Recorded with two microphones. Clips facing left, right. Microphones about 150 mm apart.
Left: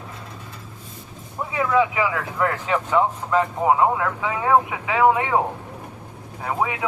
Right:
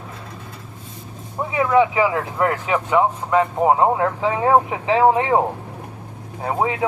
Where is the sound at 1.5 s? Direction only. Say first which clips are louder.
Right 4 dB; 25° right (ahead or behind).